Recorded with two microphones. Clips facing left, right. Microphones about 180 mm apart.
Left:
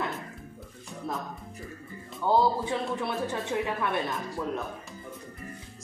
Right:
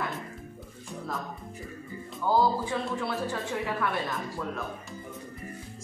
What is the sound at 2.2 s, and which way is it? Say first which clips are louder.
Speech: left 1 dB; 25° left (ahead or behind).